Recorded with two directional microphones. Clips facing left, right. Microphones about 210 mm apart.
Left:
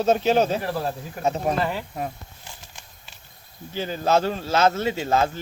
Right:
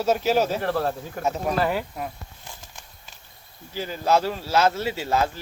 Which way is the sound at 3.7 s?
25° left (ahead or behind).